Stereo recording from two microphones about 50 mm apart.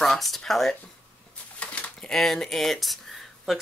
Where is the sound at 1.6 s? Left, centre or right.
Left.